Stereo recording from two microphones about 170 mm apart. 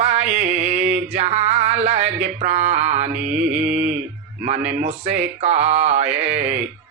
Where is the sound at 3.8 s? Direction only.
45° right (ahead or behind).